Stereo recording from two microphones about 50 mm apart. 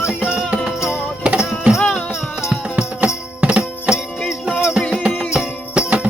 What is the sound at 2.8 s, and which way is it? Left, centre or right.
Music, right.